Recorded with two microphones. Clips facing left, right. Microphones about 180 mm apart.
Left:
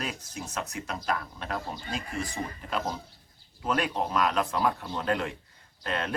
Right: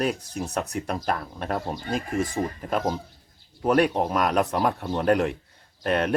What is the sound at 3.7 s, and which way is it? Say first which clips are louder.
Speech: right 6 dB; 60° right (ahead or behind).